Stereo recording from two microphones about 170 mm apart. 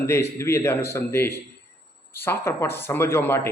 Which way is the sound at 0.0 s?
15° left (ahead or behind).